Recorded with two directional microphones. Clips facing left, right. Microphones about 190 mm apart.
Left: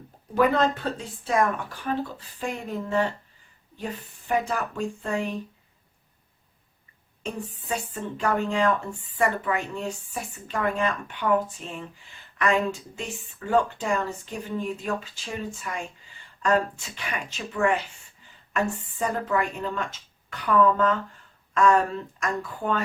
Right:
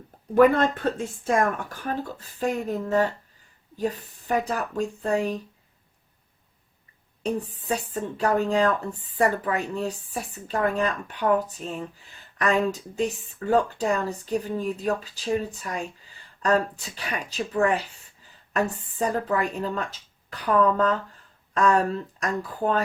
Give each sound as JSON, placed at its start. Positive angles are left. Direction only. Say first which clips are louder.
{"t": 0.3, "sound": "speech", "louder": "right 4 dB", "side_deg": -50}
{"t": 7.2, "sound": "speech", "louder": "right 6 dB", "side_deg": -40}